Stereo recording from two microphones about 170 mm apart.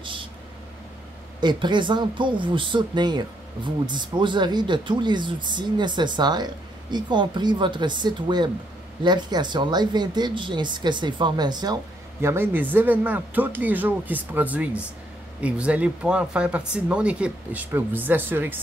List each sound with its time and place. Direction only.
0.0 s vehicle: 30° right (ahead or behind)
1.4 s speech: 25° right (ahead or behind); by 18.6 s 10° right (ahead or behind)